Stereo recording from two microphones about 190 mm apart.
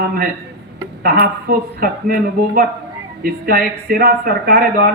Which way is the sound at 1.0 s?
50° right (ahead or behind).